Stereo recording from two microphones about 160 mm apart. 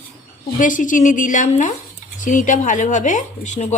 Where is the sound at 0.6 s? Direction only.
55° left (ahead or behind).